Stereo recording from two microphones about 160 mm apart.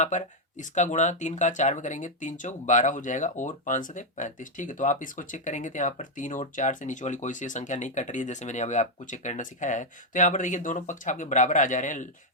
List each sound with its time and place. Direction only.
0.0 s speech: 50° left (ahead or behind)